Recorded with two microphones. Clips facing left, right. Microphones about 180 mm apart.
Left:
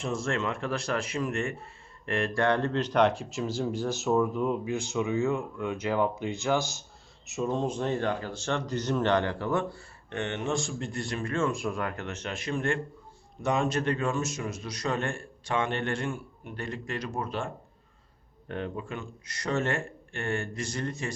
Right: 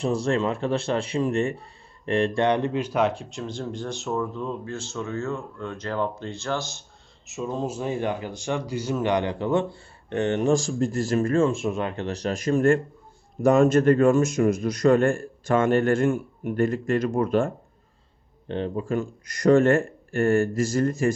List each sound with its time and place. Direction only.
0.0 s speech: 35° right (ahead or behind); by 4.2 s centre (ahead or behind)
4.2 s speech: 15° left (ahead or behind)
7.3 s speech: centre (ahead or behind); by 11.4 s 45° right (ahead or behind)
11.4 s a man's voice: 25° right (ahead or behind); by 17.5 s 50° right (ahead or behind)
18.4 s a man's voice: 30° right (ahead or behind); by 21.1 s 45° right (ahead or behind)